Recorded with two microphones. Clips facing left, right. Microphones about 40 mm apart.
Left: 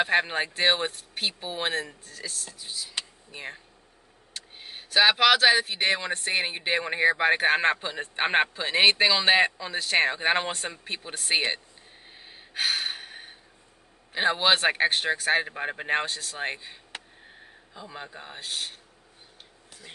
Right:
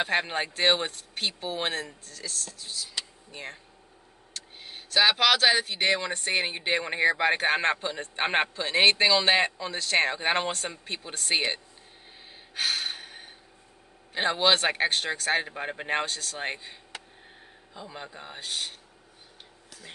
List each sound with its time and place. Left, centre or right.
0.0 s speech: centre
12.3 s gasp: centre
14.1 s speech: centre
16.9 s a sound: left
17.7 s a man's voice: centre